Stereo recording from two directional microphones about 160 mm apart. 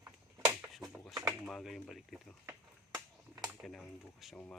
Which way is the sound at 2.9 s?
15° right (ahead or behind).